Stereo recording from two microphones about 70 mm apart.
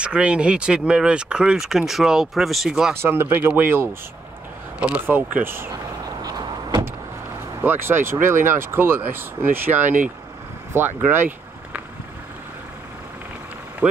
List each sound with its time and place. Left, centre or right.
0.0 s speech: centre
3.0 s speech: right
4.7 s speech: centre
5.0 s speech: right
7.6 s speech: right
10.7 s a sound: right